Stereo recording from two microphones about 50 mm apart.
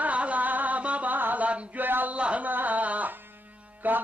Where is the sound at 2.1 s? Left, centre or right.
Right.